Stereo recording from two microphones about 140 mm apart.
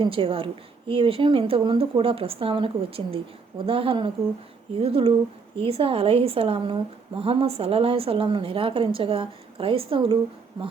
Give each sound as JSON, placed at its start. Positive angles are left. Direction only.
{"t": 0.0, "sound": "speech", "side_deg": -40}